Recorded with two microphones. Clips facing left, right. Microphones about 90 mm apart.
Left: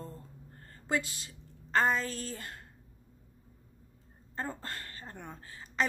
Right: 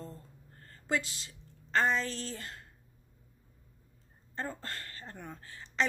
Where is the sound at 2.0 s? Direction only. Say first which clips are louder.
Even; 30° right (ahead or behind).